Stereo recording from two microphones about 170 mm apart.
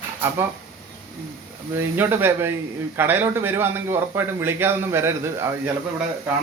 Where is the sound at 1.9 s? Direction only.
10° right (ahead or behind).